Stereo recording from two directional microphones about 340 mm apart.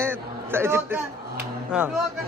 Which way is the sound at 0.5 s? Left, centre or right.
Centre.